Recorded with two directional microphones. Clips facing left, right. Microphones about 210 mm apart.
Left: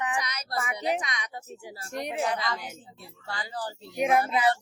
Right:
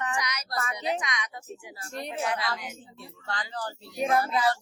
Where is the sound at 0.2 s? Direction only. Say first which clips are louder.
Even; 30° left (ahead or behind).